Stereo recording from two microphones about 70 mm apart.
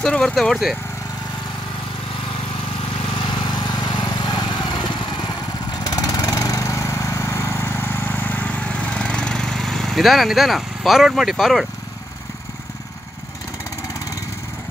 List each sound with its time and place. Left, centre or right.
0.0 s speech: centre
3.2 s vehicle: left
5.9 s lawn mower: left; by 11.6 s centre